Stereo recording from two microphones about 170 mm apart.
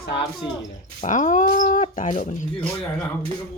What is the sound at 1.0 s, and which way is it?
Speech, 45° left (ahead or behind).